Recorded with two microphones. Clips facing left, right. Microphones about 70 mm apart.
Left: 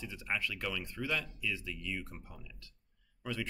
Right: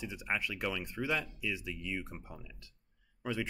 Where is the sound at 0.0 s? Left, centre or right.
Centre.